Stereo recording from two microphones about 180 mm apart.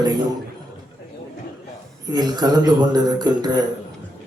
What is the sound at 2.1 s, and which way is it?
A man's voice, 25° right (ahead or behind).